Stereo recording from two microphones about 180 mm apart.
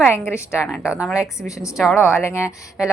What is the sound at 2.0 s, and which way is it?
Speech, 15° left (ahead or behind).